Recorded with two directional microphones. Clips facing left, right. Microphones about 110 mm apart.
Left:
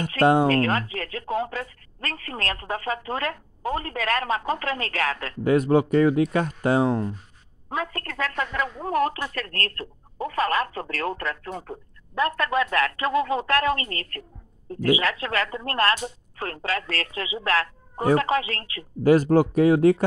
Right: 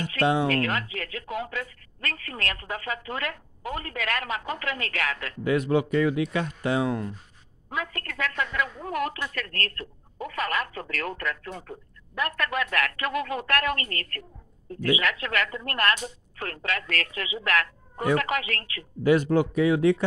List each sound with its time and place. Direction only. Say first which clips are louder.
0.1 s speech: left 5 dB; 45° left (ahead or behind)
0.5 s speech: left 4 dB; 35° left (ahead or behind)
19.0 s speech: left 4 dB; 40° left (ahead or behind)